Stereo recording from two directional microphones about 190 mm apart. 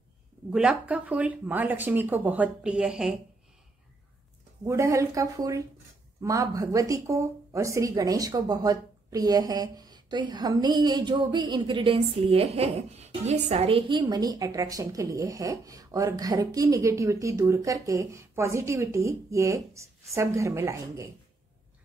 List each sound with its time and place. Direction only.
0.5 s speech: 5° right (ahead or behind)
4.6 s speech: 15° right (ahead or behind)